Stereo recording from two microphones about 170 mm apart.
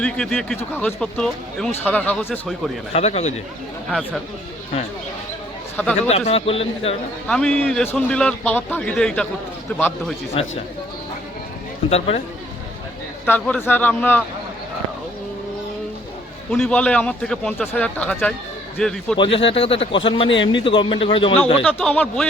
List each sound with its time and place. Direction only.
0.0 s a man's voice: 5° left (ahead or behind)
2.9 s a man's voice: 40° left (ahead or behind)
3.8 s a man's voice: centre (ahead or behind)
5.7 s speech: 10° left (ahead or behind)
6.1 s a man's voice: 35° left (ahead or behind)
7.3 s a man's voice: 5° left (ahead or behind)
10.4 s a man's voice: 35° left (ahead or behind)
11.9 s a man's voice: 35° left (ahead or behind)
13.2 s speech: 10° left (ahead or behind)
16.5 s a man's voice: 5° left (ahead or behind)
19.1 s a man's voice: 30° left (ahead or behind)
21.6 s speech: 10° left (ahead or behind)